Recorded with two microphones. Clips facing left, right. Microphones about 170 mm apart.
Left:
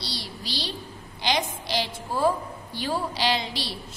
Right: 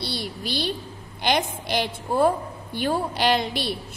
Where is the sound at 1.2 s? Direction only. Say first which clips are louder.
Right 3 dB; 55° right (ahead or behind).